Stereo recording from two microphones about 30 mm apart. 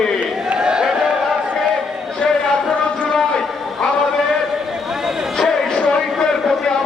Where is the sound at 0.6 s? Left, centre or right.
Right.